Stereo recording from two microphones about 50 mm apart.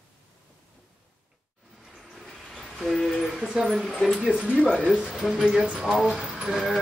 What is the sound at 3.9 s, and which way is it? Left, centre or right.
Speech, centre.